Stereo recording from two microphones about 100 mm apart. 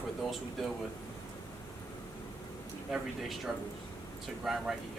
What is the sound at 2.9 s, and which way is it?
Speech, centre (ahead or behind).